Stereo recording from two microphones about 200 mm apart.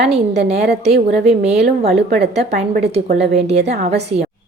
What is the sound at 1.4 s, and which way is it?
Speech, 30° right (ahead or behind).